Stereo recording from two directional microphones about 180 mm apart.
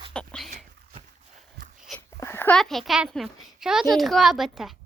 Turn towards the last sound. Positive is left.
turn(degrees=0)  # may be behind; listen again after turning